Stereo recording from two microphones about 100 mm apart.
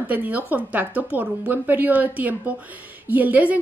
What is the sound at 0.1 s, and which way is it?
A woman's voice, 15° right (ahead or behind).